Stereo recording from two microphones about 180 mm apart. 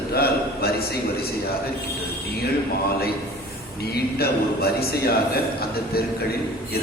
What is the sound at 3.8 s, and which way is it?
A man's voice, 60° left (ahead or behind).